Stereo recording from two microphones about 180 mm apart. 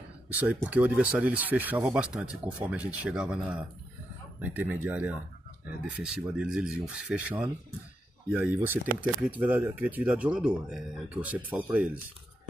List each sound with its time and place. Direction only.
0.6 s speech: 10° right (ahead or behind)